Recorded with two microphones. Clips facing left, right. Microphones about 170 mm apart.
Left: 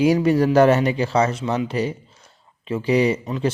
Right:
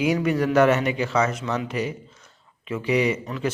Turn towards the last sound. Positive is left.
turn(degrees=35)  # may be behind; listen again after turning